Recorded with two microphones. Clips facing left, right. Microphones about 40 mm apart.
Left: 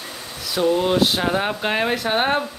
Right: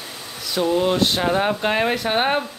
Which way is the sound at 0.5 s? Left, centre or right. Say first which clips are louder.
Left 1 dB; centre.